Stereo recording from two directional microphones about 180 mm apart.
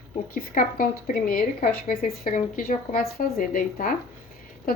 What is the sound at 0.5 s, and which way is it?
A woman's voice, 50° left (ahead or behind).